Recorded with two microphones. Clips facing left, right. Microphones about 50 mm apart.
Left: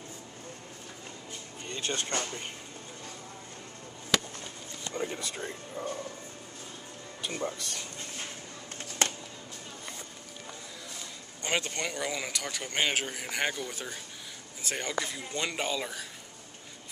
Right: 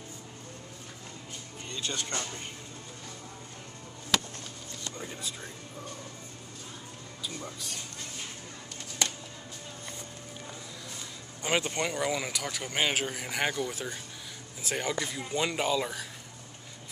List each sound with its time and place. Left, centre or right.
1.7 s speech: left
5.0 s speech: left
7.2 s speech: left
11.4 s speech: centre